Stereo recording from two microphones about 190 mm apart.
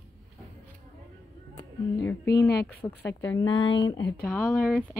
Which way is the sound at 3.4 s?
25° left (ahead or behind).